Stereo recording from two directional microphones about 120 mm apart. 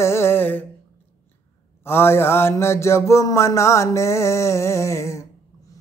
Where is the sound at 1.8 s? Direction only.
20° left (ahead or behind).